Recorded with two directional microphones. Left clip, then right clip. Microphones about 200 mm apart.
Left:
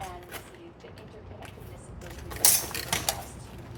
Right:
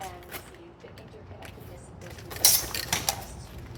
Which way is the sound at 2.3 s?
5° right (ahead or behind).